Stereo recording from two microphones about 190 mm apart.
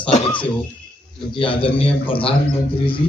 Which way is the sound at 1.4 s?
25° left (ahead or behind).